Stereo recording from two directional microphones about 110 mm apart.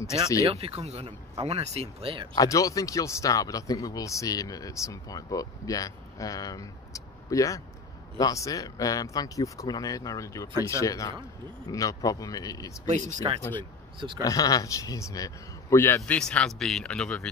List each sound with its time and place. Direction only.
0.1 s speech: 60° right (ahead or behind)
2.3 s speech: 30° left (ahead or behind)
12.8 s speech: 90° right
13.4 s speech: 20° left (ahead or behind)
13.9 s speech: 45° right (ahead or behind)
14.2 s speech: 35° left (ahead or behind)
16.1 s speech: 10° left (ahead or behind)